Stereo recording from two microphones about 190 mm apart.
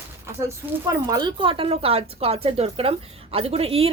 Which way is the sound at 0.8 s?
20° right (ahead or behind).